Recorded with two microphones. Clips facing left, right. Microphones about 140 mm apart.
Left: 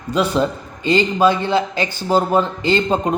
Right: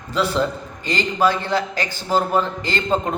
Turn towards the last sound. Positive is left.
turn(degrees=20)  # may be behind; listen again after turning